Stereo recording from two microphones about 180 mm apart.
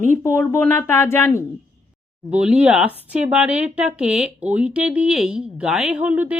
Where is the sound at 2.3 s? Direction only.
5° right (ahead or behind).